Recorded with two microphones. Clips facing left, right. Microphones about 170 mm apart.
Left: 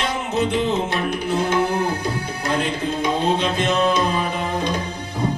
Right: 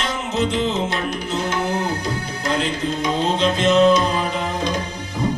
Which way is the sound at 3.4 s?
55° left (ahead or behind).